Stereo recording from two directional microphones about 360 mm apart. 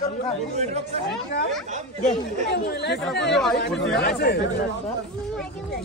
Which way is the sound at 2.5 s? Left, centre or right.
Left.